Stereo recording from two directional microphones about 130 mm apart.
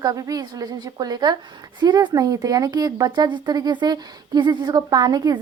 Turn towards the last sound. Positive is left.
turn(degrees=-30)  # may be behind; listen again after turning